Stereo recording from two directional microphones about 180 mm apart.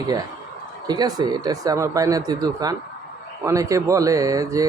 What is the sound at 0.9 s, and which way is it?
A man's voice, 20° right (ahead or behind).